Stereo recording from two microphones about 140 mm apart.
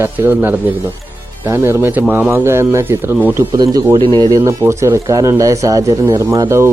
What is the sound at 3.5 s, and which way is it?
Speech, 25° right (ahead or behind).